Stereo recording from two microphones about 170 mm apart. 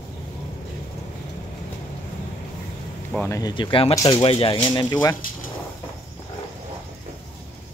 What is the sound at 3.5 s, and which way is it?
Speech, 30° left (ahead or behind).